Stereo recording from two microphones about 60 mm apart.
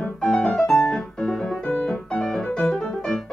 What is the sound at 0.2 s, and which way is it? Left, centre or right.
Piano, centre.